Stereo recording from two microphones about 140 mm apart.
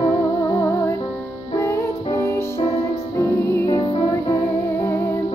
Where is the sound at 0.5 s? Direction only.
20° left (ahead or behind).